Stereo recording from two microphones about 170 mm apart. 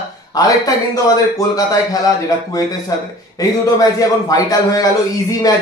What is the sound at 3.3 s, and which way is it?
A man's voice, 20° left (ahead or behind).